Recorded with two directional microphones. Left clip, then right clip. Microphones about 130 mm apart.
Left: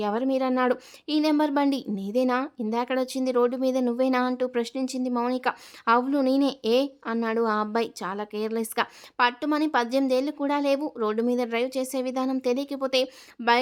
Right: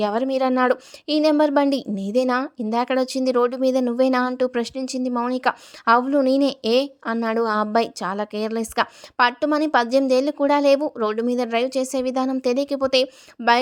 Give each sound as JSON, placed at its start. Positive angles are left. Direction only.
{"t": 0.0, "sound": "speech", "side_deg": -35}